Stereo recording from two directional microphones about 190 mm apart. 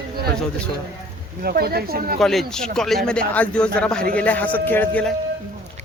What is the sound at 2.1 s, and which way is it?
A man's voice, centre (ahead or behind).